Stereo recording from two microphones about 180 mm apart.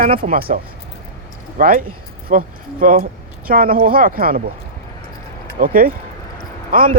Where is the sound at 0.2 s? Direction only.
55° right (ahead or behind).